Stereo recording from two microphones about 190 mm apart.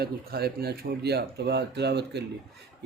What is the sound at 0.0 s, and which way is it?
Speech, 55° right (ahead or behind).